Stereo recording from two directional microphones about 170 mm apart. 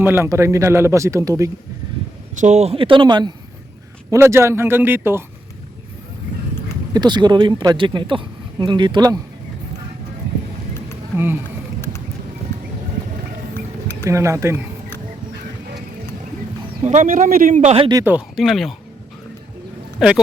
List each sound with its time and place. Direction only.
0.0 s speech: 15° right (ahead or behind)
2.4 s a man's voice: 40° right (ahead or behind)
4.1 s speech: 15° right (ahead or behind)
6.9 s speech: 25° right (ahead or behind)
14.0 s speech: 15° right (ahead or behind)
16.8 s speech: 45° right (ahead or behind)
18.3 s speech: centre (ahead or behind)
20.0 s speech: 5° right (ahead or behind)